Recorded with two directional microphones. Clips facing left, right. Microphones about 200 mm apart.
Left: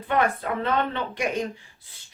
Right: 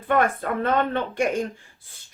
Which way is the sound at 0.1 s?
50° right (ahead or behind).